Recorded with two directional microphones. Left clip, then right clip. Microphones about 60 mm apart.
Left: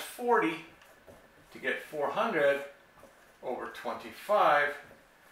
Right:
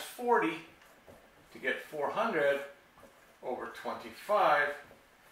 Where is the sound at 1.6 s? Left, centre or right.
Centre.